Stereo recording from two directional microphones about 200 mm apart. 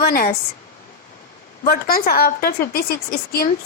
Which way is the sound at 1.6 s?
45° left (ahead or behind).